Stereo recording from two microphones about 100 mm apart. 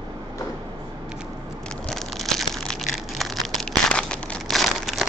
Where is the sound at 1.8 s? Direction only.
5° left (ahead or behind).